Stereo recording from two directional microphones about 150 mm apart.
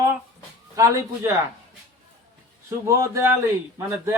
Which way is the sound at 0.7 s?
20° right (ahead or behind).